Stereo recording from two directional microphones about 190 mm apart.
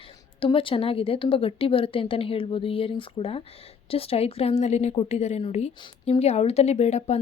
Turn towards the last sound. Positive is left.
turn(degrees=35)  # may be behind; listen again after turning